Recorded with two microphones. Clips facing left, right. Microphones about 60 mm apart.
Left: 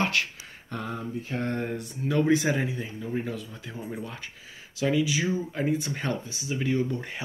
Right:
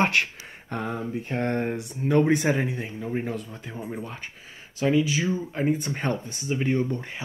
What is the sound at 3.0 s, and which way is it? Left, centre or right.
Speech, right.